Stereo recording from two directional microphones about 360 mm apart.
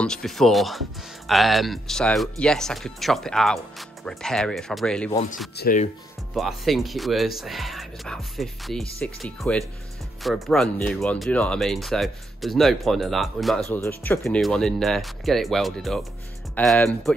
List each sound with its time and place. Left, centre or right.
0.0 s speech: centre
5.6 s speech: left
6.3 s speech: centre